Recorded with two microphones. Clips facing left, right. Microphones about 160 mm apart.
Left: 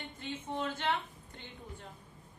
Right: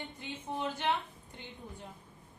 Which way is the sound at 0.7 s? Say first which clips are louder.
Right 2 dB; 15° right (ahead or behind).